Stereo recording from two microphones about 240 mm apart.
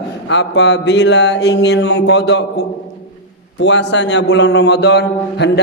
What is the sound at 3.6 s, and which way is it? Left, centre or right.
A man's voice, left.